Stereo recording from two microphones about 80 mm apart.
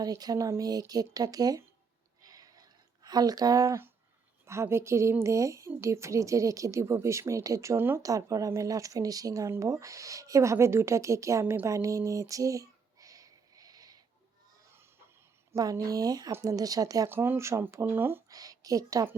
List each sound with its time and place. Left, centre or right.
0.0 s speech: right
2.2 s a sound: right
4.4 s speech: right
7.8 s speech: right
8.0 s speech: right
11.6 s a sound: right
15.5 s speech: right
17.1 s speech: right
18.3 s a woman's voice: right